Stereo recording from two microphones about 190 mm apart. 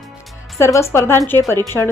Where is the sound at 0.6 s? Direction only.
15° left (ahead or behind).